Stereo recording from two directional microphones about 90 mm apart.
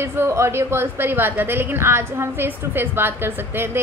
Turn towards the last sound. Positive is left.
turn(degrees=-25)  # may be behind; listen again after turning